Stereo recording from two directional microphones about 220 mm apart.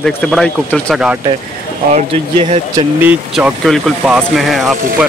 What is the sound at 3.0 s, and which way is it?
Speech, 5° right (ahead or behind).